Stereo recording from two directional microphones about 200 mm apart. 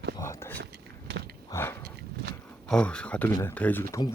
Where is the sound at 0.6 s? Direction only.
55° right (ahead or behind).